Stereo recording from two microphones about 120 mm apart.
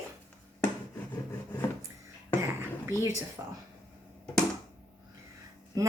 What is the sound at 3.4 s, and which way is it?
Speech, 25° right (ahead or behind).